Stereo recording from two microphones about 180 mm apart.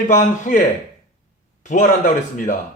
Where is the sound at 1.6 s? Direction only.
45° left (ahead or behind).